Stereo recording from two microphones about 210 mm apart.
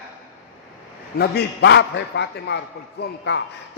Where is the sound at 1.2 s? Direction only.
55° left (ahead or behind).